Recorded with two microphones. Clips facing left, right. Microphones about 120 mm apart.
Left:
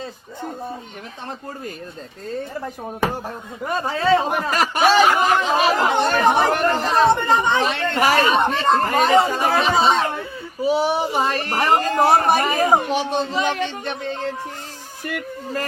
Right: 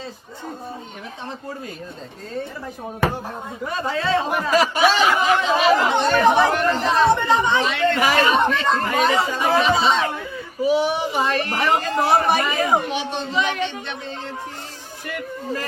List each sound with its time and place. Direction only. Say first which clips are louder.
3.7 s speech: left 4 dB; 45° left (ahead or behind)
15.0 s speech: even; 50° left (ahead or behind)